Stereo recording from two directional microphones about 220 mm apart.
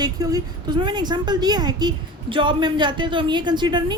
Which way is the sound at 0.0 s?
15° right (ahead or behind).